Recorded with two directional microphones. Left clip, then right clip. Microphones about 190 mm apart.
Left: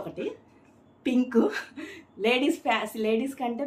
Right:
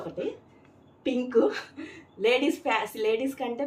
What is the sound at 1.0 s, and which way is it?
A woman's voice, 20° left (ahead or behind).